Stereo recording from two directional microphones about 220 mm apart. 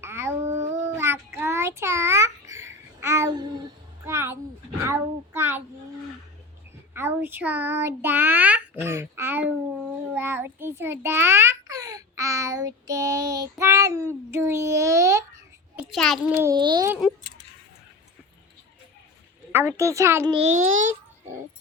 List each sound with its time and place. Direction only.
0.0 s a sound: 10° right (ahead or behind)
4.8 s a child's voice: 10° right (ahead or behind)
6.9 s a child's voice: 10° right (ahead or behind)
16.4 s a child's voice: 15° right (ahead or behind)
19.5 s a child's voice: 10° right (ahead or behind)
20.3 s a child's voice: 30° right (ahead or behind)